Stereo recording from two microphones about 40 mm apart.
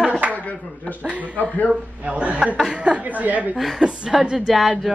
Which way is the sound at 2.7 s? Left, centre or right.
Right.